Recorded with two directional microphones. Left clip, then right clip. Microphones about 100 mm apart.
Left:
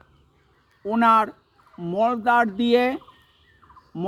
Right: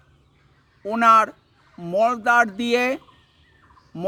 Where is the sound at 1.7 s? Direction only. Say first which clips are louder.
Right 2 dB; 30° right (ahead or behind).